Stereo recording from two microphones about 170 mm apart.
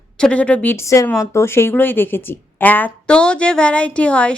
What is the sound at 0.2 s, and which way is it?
A woman's voice, 5° left (ahead or behind).